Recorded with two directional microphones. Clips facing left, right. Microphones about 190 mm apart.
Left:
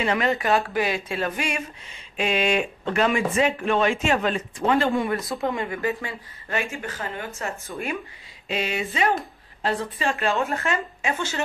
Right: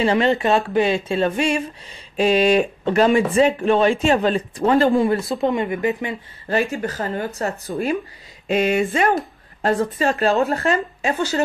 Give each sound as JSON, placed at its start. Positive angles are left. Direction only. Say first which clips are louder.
{"t": 0.0, "sound": "speech", "louder": "right 6 dB", "side_deg": -30}
{"t": 6.4, "sound": "speech", "louder": "right 8 dB", "side_deg": -35}
{"t": 8.5, "sound": "a sound", "louder": "right 9 dB", "side_deg": -50}
{"t": 9.6, "sound": "speech", "louder": "right 7 dB", "side_deg": -45}